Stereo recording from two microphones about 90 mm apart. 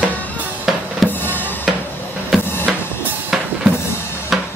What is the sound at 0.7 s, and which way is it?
Drum kit, 5° right (ahead or behind).